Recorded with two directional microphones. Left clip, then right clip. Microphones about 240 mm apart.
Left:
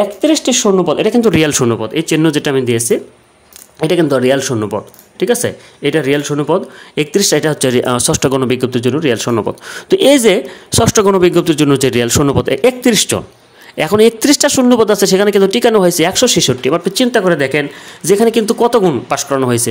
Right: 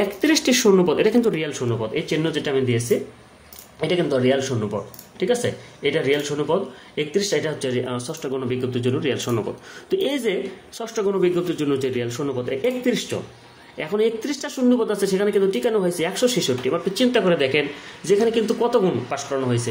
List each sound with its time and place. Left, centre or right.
0.0 s speech: left